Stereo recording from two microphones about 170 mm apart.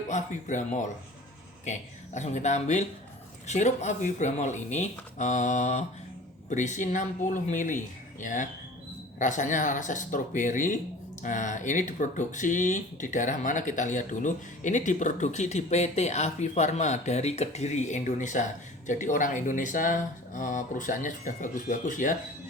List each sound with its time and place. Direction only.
0.1 s speech: 45° left (ahead or behind)
2.1 s speech: 45° left (ahead or behind)